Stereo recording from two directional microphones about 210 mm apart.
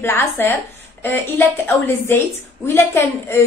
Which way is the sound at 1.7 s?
10° left (ahead or behind).